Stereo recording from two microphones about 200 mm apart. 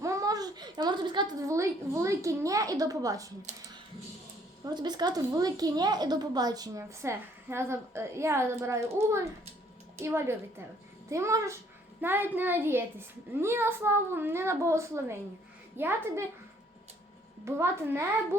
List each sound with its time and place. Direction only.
0.0 s a woman's voice: 15° right (ahead or behind)
4.6 s a woman's voice: 20° right (ahead or behind)
17.4 s a woman's voice: 15° right (ahead or behind)